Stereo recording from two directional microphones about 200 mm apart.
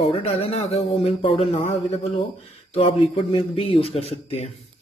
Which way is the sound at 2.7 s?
30° left (ahead or behind).